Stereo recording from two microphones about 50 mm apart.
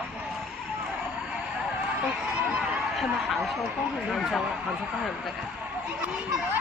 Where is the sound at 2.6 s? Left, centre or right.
Centre.